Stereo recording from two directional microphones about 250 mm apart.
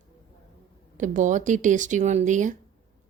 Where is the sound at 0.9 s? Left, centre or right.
Right.